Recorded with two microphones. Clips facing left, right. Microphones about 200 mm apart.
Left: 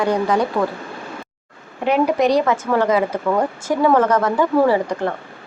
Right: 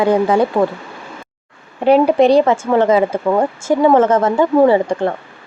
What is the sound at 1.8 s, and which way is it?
Speech, 30° right (ahead or behind).